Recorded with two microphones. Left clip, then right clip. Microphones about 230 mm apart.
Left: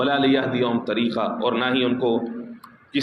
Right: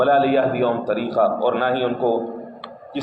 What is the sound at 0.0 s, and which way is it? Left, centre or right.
A man's voice, left.